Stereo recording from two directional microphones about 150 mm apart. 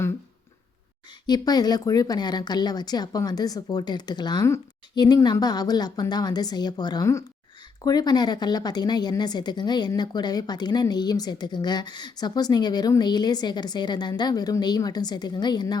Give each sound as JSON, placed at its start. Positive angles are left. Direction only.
{"t": 1.3, "sound": "speech", "side_deg": 25}